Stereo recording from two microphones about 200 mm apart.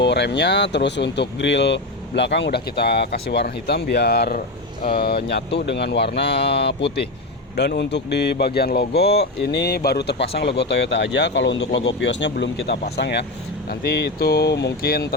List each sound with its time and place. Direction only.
0.0 s speech: 60° left (ahead or behind)